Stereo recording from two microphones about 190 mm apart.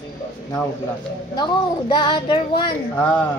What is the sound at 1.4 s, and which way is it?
Child singing, 25° left (ahead or behind).